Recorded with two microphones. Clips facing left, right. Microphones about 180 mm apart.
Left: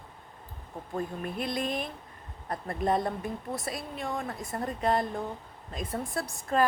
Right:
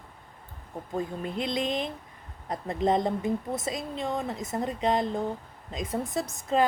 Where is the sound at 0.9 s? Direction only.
20° right (ahead or behind).